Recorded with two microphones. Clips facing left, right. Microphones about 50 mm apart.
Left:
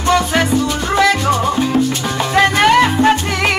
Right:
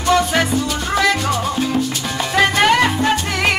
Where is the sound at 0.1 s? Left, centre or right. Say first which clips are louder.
Left 1 dB; centre.